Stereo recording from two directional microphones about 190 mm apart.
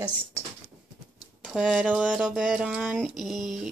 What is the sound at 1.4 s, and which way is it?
Speech, centre (ahead or behind).